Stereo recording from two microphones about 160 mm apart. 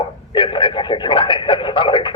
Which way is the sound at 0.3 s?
30° left (ahead or behind).